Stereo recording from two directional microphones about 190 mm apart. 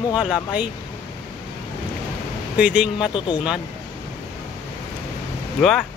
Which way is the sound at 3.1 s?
25° left (ahead or behind).